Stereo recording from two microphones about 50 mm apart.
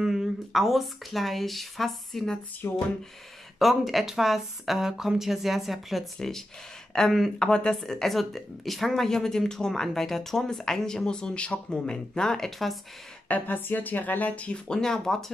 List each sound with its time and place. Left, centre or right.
0.0 s speech: centre
2.6 s speech: left
3.5 s a woman's voice: centre
7.3 s a woman's voice: centre
13.3 s speech: left
14.7 s a woman's voice: centre